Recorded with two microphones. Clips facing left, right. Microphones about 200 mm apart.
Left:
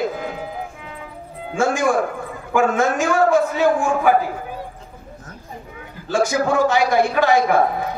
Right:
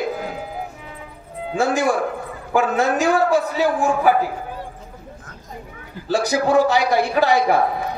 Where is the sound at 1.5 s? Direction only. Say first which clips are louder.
Left 1 dB; 35° right (ahead or behind).